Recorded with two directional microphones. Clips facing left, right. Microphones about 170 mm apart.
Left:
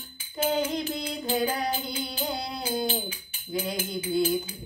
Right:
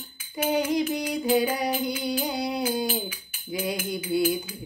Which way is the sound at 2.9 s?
30° left (ahead or behind).